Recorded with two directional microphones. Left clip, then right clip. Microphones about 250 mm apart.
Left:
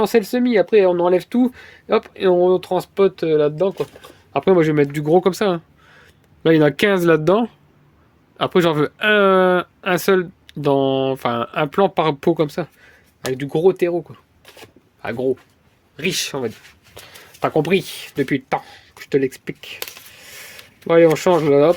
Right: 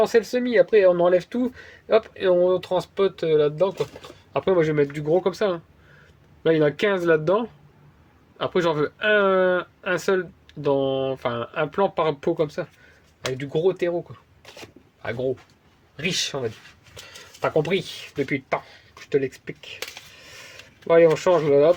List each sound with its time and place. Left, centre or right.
0.0 s speech: left
16.0 s speech: left
20.1 s a sound: left